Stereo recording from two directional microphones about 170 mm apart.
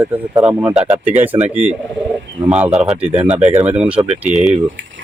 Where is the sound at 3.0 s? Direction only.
10° right (ahead or behind).